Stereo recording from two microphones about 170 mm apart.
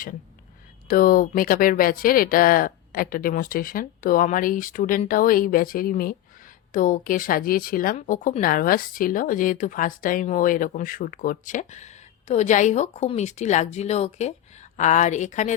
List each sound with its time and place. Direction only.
0.9 s speech: 55° left (ahead or behind)